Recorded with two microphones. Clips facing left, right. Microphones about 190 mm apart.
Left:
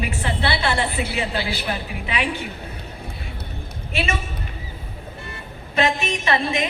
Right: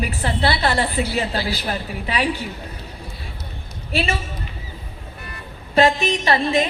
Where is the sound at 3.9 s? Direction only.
35° right (ahead or behind).